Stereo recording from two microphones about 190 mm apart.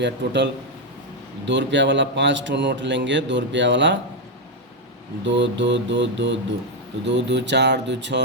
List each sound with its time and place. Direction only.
0.0 s a man's voice: 65° right (ahead or behind)
5.2 s a man's voice: 70° right (ahead or behind)